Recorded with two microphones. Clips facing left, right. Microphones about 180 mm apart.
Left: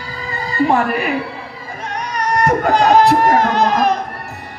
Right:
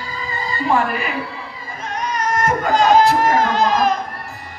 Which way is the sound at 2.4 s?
65° left (ahead or behind).